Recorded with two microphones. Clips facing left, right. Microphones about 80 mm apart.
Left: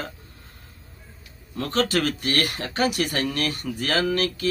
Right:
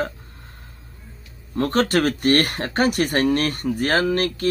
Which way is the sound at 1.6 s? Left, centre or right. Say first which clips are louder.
Right 4 dB; right.